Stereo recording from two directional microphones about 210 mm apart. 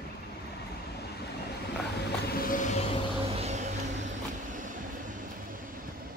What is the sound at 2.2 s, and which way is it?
Vehicle, 45° left (ahead or behind).